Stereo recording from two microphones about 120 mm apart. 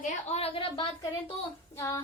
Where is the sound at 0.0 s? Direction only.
65° left (ahead or behind).